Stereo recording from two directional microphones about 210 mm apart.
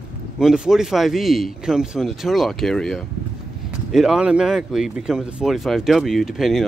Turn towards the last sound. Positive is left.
turn(degrees=0)  # may be behind; listen again after turning